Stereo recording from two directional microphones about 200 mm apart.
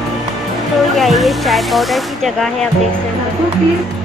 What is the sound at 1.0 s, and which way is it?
Speech, centre (ahead or behind).